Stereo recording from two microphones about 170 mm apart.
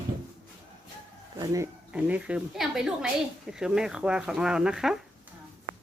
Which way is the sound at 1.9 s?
10° right (ahead or behind).